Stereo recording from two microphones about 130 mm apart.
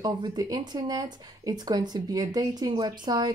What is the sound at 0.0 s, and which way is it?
Speech, 30° right (ahead or behind).